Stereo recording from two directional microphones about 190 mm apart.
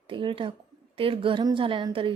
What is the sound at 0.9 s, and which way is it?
Speech, 30° right (ahead or behind).